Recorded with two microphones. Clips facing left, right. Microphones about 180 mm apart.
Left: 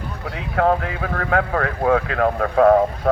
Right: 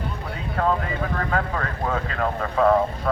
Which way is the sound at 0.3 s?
70° left (ahead or behind).